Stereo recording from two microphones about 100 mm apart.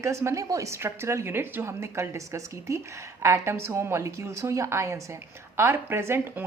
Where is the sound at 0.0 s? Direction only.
30° right (ahead or behind).